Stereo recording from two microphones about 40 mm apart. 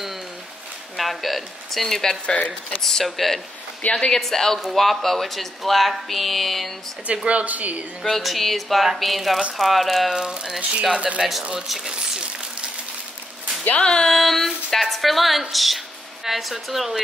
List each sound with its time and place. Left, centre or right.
0.9 s speech: centre
2.2 s speech: left
2.8 s speech: centre
3.9 s speech: centre
7.2 s a woman's voice: right
8.0 s speech: centre
10.1 s speech: centre
11.6 s speech: centre
13.7 s speech: left
14.0 s speech: centre